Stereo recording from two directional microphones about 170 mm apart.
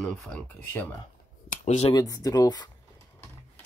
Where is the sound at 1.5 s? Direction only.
45° left (ahead or behind).